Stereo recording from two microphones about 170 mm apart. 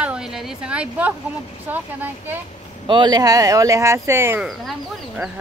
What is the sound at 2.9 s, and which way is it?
Speech, 25° right (ahead or behind).